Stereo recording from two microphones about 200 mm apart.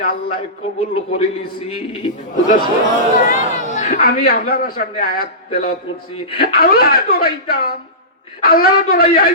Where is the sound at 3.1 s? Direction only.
40° left (ahead or behind).